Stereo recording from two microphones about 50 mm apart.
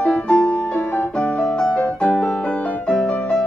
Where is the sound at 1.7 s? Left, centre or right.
Left.